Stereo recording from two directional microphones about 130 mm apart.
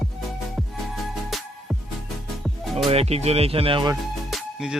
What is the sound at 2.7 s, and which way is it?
Speech, 50° right (ahead or behind).